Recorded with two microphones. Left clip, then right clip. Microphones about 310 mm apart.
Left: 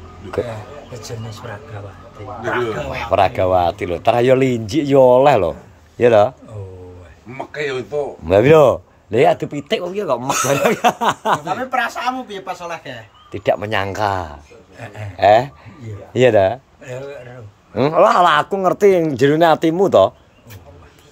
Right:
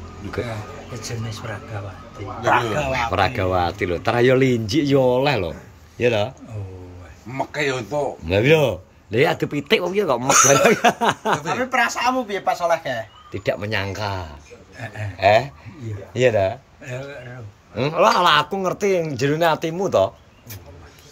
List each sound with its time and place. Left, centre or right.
2.9 s speech: centre
7.5 s speech: right
8.3 s speech: centre
11.4 s speech: centre
12.4 s speech: centre
13.3 s speech: centre